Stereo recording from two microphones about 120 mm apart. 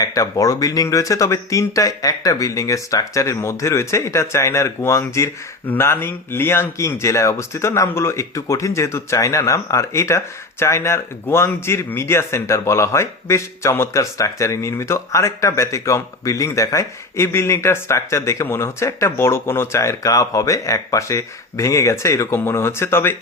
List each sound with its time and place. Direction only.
0.0 s a man's voice: 30° left (ahead or behind)